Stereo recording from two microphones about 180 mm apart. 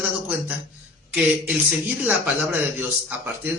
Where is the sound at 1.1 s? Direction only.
10° right (ahead or behind).